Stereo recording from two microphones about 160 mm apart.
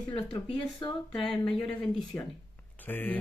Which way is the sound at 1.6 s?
10° left (ahead or behind).